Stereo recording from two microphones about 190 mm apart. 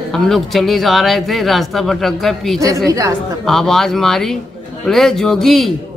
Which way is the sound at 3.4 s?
Centre (ahead or behind).